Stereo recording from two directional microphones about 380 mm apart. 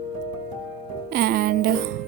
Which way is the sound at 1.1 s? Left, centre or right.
Right.